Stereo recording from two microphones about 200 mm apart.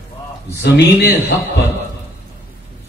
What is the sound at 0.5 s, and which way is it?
Speech, 60° left (ahead or behind).